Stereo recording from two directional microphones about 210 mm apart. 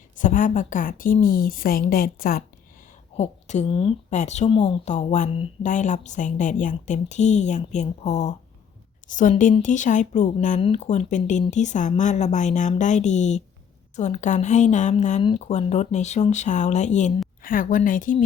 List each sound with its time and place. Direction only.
0.2 s a woman's voice: 40° left (ahead or behind)
3.2 s a woman's voice: 35° left (ahead or behind)